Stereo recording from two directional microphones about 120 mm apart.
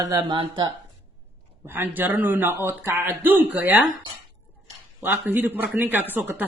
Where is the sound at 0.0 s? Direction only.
30° right (ahead or behind).